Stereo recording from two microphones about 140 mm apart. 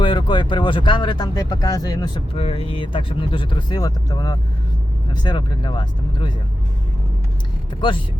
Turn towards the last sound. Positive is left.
turn(degrees=35)  # may be behind; listen again after turning